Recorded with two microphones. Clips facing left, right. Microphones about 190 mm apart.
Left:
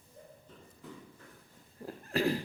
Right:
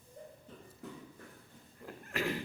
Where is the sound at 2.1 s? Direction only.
35° left (ahead or behind).